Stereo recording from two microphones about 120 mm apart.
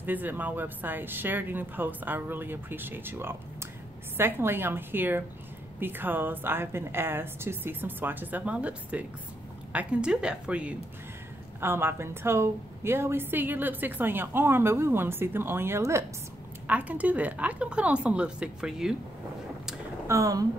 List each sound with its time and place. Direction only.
0.0 s a woman's voice: 15° right (ahead or behind)
20.1 s a woman's voice: 25° right (ahead or behind)